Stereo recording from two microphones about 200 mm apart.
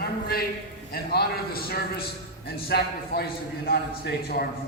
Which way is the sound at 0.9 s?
50° left (ahead or behind).